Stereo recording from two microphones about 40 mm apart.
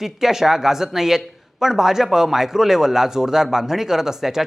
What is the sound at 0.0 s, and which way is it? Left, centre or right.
Speech, centre.